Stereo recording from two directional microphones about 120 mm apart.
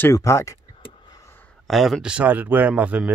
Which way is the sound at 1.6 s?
Centre (ahead or behind).